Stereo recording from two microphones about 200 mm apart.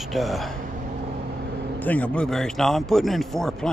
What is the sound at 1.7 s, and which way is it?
Speech, 5° left (ahead or behind).